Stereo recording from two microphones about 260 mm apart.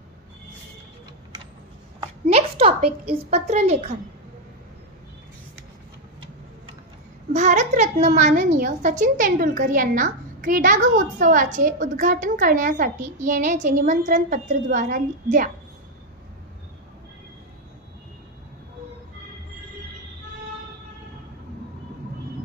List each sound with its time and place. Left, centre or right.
2.2 s a woman's voice: right
7.3 s a woman's voice: right